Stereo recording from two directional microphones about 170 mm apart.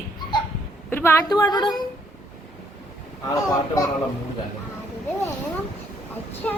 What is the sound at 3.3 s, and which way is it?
Speech, 20° left (ahead or behind).